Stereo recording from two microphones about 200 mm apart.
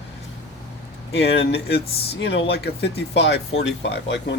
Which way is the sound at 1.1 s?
55° left (ahead or behind).